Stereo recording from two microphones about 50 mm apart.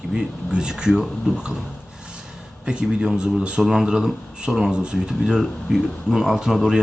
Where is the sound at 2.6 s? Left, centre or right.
Centre.